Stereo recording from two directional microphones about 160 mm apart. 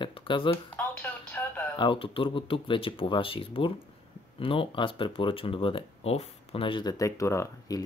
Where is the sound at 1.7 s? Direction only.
30° left (ahead or behind).